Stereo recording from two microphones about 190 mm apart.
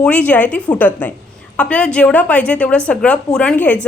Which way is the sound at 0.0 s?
5° left (ahead or behind).